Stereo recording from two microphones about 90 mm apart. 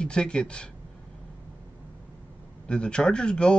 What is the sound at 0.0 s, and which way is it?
Speech, 10° left (ahead or behind).